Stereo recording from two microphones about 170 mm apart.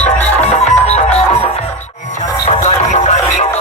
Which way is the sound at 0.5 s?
40° left (ahead or behind).